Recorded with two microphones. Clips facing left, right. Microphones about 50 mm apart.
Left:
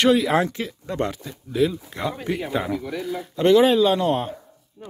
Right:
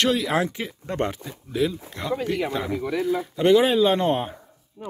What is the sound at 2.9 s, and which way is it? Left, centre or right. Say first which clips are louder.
Speech: right 5 dB; right.